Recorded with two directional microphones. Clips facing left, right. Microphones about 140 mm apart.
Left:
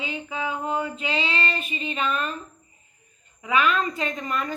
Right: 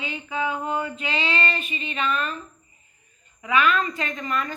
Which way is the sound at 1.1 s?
Centre (ahead or behind).